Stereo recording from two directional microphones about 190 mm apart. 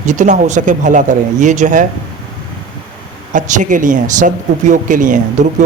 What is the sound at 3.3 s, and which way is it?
Speech, 40° right (ahead or behind).